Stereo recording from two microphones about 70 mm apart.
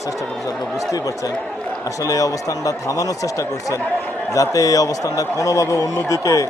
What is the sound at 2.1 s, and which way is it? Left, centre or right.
A man's voice, left.